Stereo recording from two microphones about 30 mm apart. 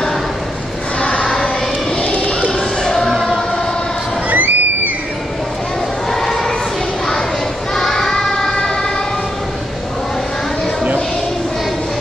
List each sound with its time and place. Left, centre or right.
0.9 s a sound: left
2.8 s choir: centre
3.1 s choir: centre
4.3 s crowd: right
6.1 s choir: centre
7.7 s child singing: centre
8.5 s emergency vehicle: left